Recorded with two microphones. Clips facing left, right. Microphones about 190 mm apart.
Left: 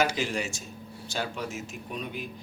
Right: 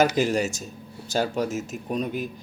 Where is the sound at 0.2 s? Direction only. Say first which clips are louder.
Right 8 dB; 40° right (ahead or behind).